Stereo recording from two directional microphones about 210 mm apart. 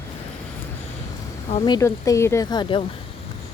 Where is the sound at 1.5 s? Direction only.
30° left (ahead or behind).